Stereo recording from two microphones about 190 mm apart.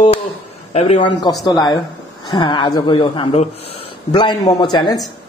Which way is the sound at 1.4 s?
20° left (ahead or behind).